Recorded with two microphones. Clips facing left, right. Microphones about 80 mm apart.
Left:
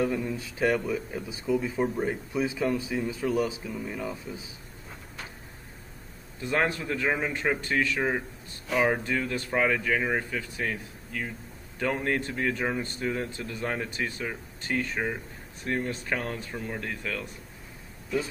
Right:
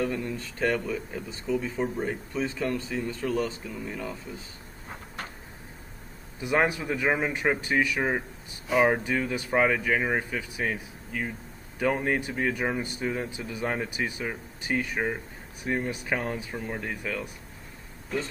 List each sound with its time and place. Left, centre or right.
0.0 s speech: centre
4.8 s vehicle: right
6.4 s speech: centre